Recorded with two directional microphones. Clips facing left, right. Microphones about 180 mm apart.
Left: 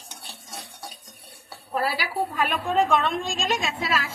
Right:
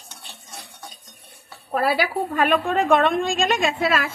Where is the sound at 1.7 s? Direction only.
55° right (ahead or behind).